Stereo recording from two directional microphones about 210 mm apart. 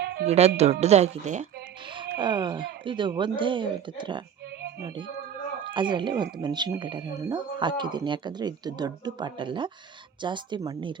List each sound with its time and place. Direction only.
0.0 s music: 50° right (ahead or behind)
0.3 s speech: 30° right (ahead or behind)
2.1 s speech: 20° right (ahead or behind)
5.7 s speech: 20° right (ahead or behind)